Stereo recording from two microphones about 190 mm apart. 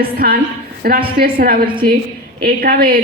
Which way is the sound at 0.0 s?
55° right (ahead or behind).